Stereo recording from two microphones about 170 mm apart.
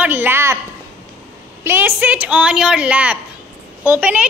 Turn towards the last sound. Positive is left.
turn(degrees=-10)  # may be behind; listen again after turning